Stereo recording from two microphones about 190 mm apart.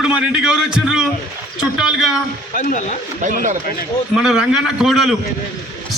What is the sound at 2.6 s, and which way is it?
Speech, 40° left (ahead or behind).